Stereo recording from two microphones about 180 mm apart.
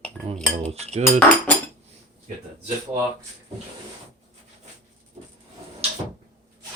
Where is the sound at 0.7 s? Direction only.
35° right (ahead or behind).